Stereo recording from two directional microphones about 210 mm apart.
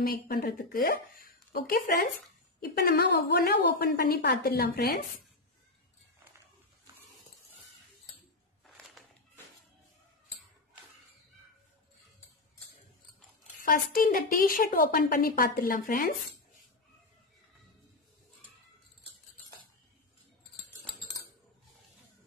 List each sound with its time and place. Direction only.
0.0 s a woman's voice: 45° left (ahead or behind)
8.7 s a sound: 5° left (ahead or behind)
13.6 s a woman's voice: 40° left (ahead or behind)